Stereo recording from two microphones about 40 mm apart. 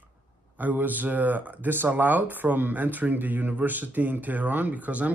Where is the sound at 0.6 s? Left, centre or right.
Right.